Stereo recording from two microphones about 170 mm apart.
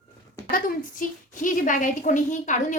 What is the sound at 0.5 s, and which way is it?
A woman's voice, 50° left (ahead or behind).